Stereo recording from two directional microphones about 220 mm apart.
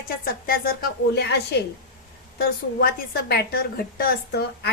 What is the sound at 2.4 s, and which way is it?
A woman's voice, 45° left (ahead or behind).